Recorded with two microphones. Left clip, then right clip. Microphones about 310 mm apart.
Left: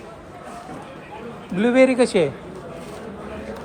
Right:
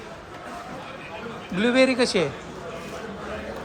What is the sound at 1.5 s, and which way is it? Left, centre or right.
Speech, centre.